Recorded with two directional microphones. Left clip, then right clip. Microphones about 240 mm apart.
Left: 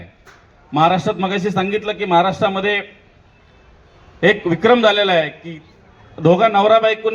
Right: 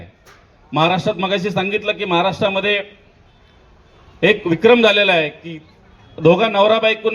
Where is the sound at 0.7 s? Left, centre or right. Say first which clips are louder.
Left 1 dB; right.